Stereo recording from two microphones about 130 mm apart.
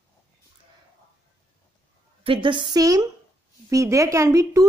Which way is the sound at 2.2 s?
40° right (ahead or behind).